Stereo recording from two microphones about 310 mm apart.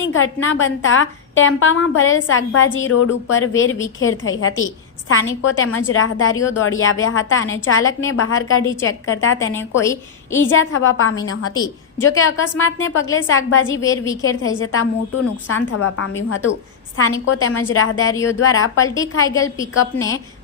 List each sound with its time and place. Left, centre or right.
0.0 s a woman's voice: left
9.6 s a woman's voice: centre
10.5 s a woman's voice: left
11.5 s a woman's voice: centre
12.2 s a woman's voice: left
13.8 s a woman's voice: centre
14.1 s a woman's voice: left
19.2 s a woman's voice: centre